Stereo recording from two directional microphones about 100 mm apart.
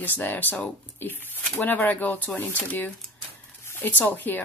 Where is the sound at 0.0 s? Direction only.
20° left (ahead or behind).